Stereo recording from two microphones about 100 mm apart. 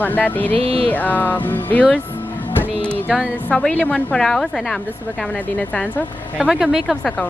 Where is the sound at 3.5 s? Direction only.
10° left (ahead or behind).